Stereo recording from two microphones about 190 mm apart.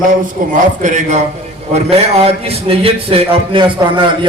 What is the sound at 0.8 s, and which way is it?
A man's voice, 40° right (ahead or behind).